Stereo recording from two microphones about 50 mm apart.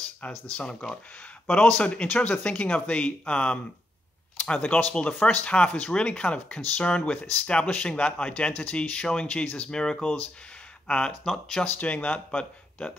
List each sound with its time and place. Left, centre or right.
0.2 s speech: left
0.7 s speech: centre
1.5 s speech: left
4.6 s speech: left
11.6 s speech: left
11.9 s speech: left